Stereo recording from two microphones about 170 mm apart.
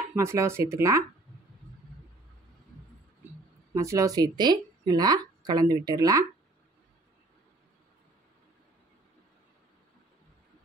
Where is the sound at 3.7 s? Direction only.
15° right (ahead or behind).